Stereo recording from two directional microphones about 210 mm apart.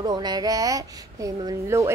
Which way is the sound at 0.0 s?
20° right (ahead or behind).